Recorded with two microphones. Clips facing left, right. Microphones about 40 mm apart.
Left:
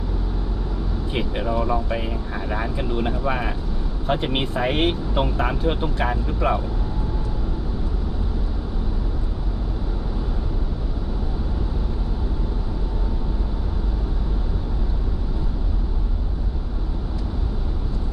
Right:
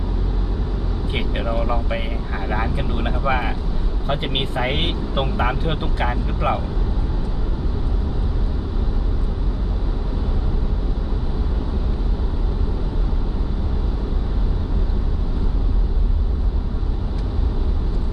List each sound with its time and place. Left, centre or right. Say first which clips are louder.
1.1 s speech: left 1 dB; centre